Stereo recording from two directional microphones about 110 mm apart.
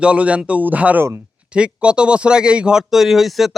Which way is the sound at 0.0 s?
10° right (ahead or behind).